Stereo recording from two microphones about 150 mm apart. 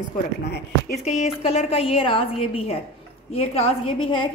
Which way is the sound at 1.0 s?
45° left (ahead or behind).